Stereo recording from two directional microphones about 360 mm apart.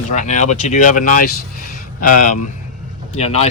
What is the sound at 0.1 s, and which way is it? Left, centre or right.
Speech, centre.